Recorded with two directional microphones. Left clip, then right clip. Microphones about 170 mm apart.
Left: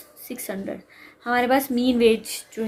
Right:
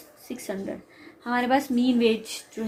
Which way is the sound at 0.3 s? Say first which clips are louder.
Left 2 dB; 40° left (ahead or behind).